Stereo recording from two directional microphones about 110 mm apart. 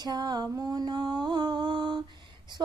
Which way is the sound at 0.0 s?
40° right (ahead or behind).